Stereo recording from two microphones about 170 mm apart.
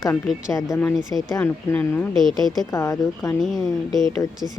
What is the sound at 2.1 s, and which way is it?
Speech, centre (ahead or behind).